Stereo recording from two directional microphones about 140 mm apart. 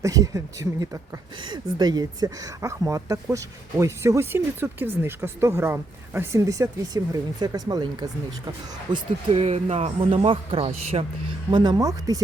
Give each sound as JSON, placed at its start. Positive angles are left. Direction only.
{"t": 0.0, "sound": "speech", "side_deg": -25}
{"t": 8.9, "sound": "speech", "side_deg": -45}
{"t": 11.5, "sound": "speech", "side_deg": -30}